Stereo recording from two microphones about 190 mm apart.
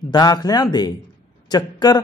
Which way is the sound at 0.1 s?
20° left (ahead or behind).